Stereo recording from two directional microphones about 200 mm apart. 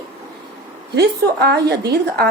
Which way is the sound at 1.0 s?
55° right (ahead or behind).